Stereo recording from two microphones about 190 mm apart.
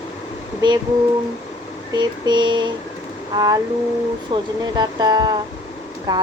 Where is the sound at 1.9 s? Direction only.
25° right (ahead or behind).